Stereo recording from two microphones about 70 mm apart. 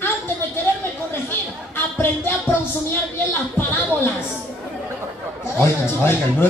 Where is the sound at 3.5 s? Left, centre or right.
Left.